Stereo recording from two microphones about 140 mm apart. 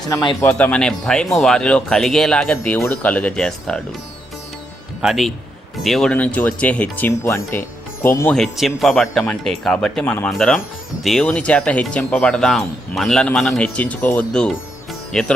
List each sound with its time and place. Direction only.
0.4 s speech: 10° left (ahead or behind)
5.0 s speech: centre (ahead or behind); by 8.3 s 20° left (ahead or behind)
8.3 s speech: centre (ahead or behind)